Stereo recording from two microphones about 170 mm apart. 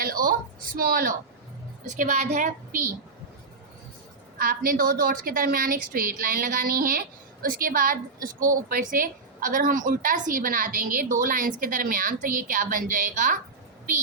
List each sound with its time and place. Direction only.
0.0 s a woman's voice: 60° right (ahead or behind)
1.8 s a woman's voice: 45° right (ahead or behind)
4.4 s a woman's voice: 55° right (ahead or behind)